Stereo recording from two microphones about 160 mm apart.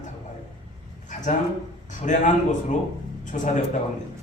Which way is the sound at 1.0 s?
50° left (ahead or behind).